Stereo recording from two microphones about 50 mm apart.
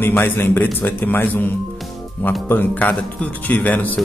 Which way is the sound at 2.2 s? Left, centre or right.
Left.